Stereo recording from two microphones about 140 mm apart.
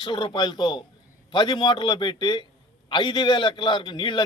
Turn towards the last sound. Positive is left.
turn(degrees=35)  # may be behind; listen again after turning